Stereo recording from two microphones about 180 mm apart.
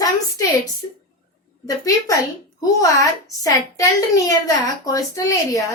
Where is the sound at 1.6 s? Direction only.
20° left (ahead or behind).